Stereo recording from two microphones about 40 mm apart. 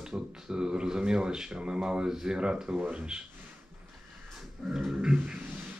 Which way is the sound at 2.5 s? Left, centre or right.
Right.